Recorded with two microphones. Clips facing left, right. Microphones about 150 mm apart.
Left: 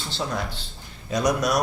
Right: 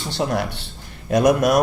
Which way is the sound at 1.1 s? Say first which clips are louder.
Right 7 dB; 55° right (ahead or behind).